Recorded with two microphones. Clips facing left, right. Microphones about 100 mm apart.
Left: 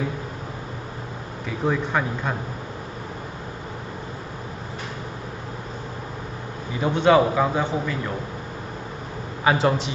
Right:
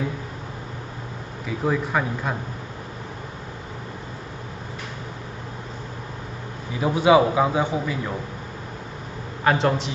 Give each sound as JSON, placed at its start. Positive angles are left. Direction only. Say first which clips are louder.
{"t": 1.6, "sound": "speech", "louder": "even", "side_deg": 0}
{"t": 6.8, "sound": "a man's voice", "louder": "right 1 dB", "side_deg": -5}
{"t": 9.4, "sound": "speech", "louder": "even", "side_deg": 5}